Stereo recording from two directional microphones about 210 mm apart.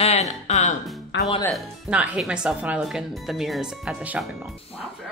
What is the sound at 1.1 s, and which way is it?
Music, 55° left (ahead or behind).